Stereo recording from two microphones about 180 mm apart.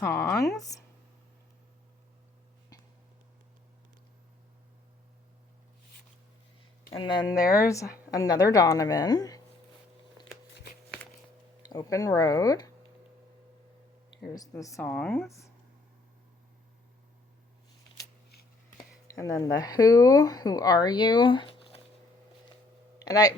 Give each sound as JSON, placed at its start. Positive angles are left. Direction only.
{"t": 0.0, "sound": "a woman's voice", "side_deg": 15}
{"t": 6.9, "sound": "speech", "side_deg": 25}
{"t": 7.4, "sound": "speech", "side_deg": 55}
{"t": 8.1, "sound": "speech", "side_deg": 20}
{"t": 11.6, "sound": "speech", "side_deg": 20}
{"t": 14.3, "sound": "a woman's voice", "side_deg": 20}
{"t": 19.0, "sound": "speech", "side_deg": 20}
{"t": 23.0, "sound": "speech", "side_deg": 20}